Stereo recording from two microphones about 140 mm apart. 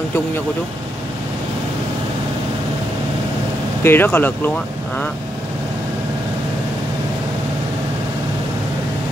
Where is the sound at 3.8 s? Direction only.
15° left (ahead or behind).